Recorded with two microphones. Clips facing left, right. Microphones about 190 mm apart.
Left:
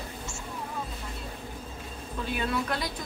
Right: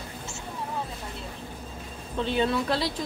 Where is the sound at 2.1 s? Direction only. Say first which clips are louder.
Right 5 dB; 25° right (ahead or behind).